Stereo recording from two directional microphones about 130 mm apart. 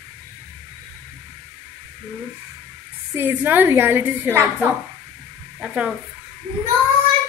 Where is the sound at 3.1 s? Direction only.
15° right (ahead or behind).